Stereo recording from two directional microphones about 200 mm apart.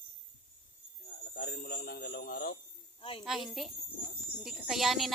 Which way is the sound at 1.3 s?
55° left (ahead or behind).